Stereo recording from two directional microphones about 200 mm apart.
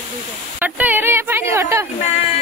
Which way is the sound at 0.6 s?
10° right (ahead or behind).